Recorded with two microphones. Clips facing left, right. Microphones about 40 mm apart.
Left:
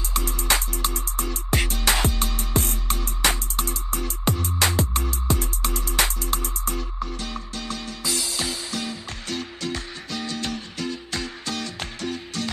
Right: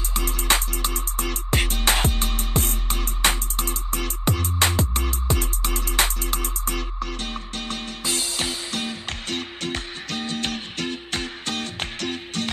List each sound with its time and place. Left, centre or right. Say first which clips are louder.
0.2 s music: right 3 dB; right
7.2 s music: right 1 dB; right